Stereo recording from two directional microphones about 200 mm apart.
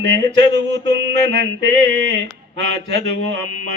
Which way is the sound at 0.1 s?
60° right (ahead or behind).